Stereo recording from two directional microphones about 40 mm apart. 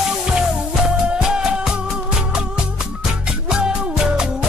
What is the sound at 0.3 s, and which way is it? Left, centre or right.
Music, centre.